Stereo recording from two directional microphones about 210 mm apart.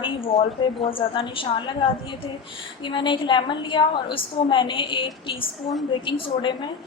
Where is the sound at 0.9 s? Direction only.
25° left (ahead or behind).